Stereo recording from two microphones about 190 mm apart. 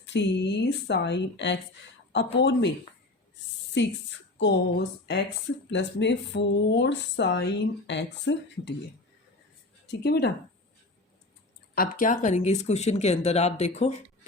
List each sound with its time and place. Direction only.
0.0 s speech: 65° left (ahead or behind)
4.4 s speech: 70° left (ahead or behind)
9.9 s speech: 60° left (ahead or behind)
11.7 s speech: 50° left (ahead or behind)